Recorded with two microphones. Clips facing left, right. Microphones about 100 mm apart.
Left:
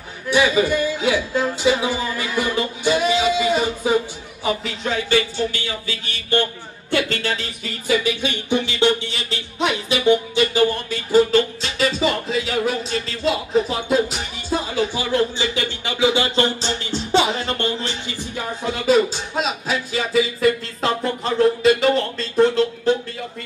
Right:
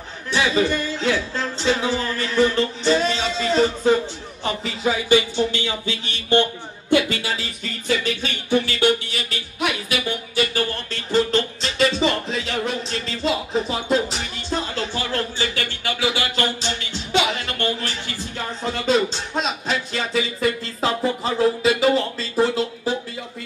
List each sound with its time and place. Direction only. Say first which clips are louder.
0.3 s speech: left 3 dB; 10° left (ahead or behind)
5.1 s a sound: right 2 dB; 25° right (ahead or behind)
6.9 s speech: right 2 dB; 10° right (ahead or behind)
8.0 s speech: left 3 dB; 15° left (ahead or behind)
18.6 s speech: left 3 dB; 5° left (ahead or behind)